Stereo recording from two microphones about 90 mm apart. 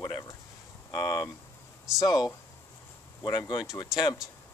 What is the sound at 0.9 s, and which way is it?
Speech, 50° left (ahead or behind).